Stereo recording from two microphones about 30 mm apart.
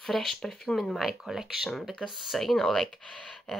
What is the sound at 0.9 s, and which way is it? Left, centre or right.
Speech, centre.